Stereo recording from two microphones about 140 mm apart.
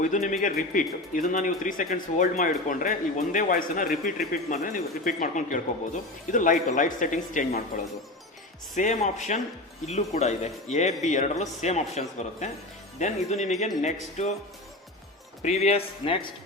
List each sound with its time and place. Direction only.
0.0 s speech: 65° left (ahead or behind)
8.7 s speech: 60° left (ahead or behind)
15.4 s speech: 50° left (ahead or behind)